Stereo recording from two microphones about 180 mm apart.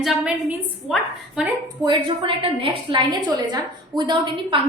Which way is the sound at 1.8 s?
25° right (ahead or behind).